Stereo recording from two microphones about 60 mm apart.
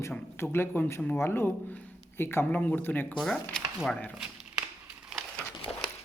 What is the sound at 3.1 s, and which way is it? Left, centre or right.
Speech, centre.